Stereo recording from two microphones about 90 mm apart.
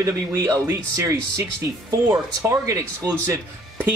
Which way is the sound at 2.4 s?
35° right (ahead or behind).